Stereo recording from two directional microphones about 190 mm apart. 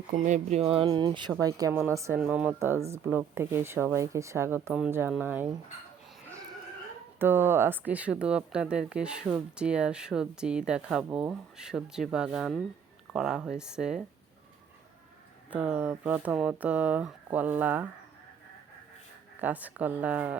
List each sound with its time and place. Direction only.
0.1 s speech: 40° right (ahead or behind); by 5.5 s 10° right (ahead or behind)
7.2 s speech: 10° right (ahead or behind)
15.4 s speech: 10° right (ahead or behind)
19.4 s speech: 10° right (ahead or behind)